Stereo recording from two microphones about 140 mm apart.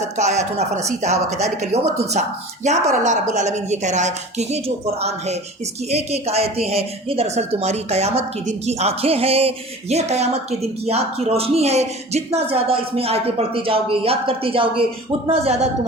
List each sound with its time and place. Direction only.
0.2 s a woman's voice: 55° right (ahead or behind)